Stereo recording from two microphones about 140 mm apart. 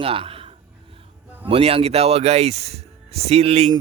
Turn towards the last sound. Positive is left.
turn(degrees=-45)  # may be behind; listen again after turning